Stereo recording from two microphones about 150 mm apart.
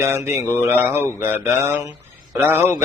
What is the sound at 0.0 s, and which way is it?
Mantra, 15° right (ahead or behind).